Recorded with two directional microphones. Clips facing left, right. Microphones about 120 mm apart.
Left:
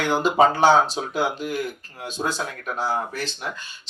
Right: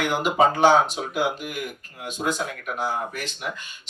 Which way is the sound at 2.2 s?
35° left (ahead or behind).